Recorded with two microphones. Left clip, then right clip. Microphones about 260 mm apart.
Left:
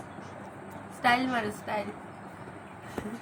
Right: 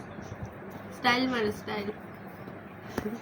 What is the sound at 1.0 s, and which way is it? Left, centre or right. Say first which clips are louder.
Mantra: left 1 dB; left.